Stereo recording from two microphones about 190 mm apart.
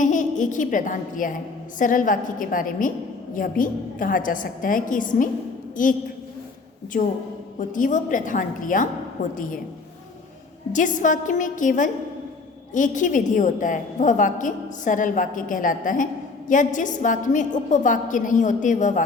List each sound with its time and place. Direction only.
0.0 s a woman's voice: 40° left (ahead or behind)
6.9 s a woman's voice: 45° left (ahead or behind)
10.7 s a woman's voice: 45° left (ahead or behind)